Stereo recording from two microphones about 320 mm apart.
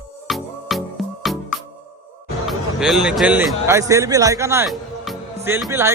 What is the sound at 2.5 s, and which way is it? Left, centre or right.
A man's voice, centre.